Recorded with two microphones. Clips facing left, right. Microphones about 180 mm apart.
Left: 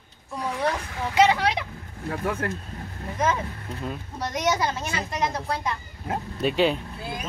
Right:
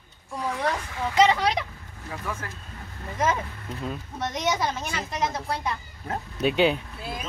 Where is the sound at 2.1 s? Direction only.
60° left (ahead or behind).